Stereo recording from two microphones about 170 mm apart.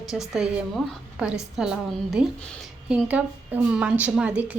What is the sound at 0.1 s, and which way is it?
A woman's voice, centre (ahead or behind).